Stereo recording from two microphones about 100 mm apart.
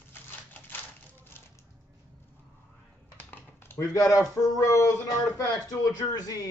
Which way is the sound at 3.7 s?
35° left (ahead or behind).